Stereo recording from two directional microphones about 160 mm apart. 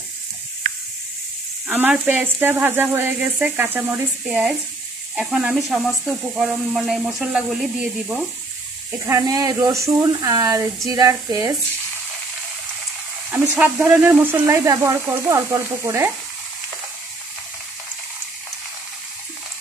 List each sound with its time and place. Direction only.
1.7 s speech: 10° right (ahead or behind)
9.0 s speech: 20° right (ahead or behind)
13.3 s speech: 5° right (ahead or behind)